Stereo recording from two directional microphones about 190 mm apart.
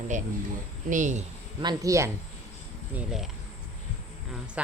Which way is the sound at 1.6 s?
15° right (ahead or behind).